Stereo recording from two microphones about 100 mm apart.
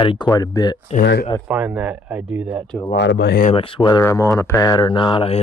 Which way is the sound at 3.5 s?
65° left (ahead or behind).